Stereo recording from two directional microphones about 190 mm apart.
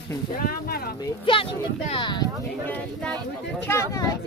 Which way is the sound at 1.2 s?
25° left (ahead or behind).